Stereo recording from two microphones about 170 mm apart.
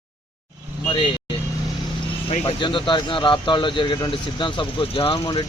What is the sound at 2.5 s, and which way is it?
Speech, 30° left (ahead or behind).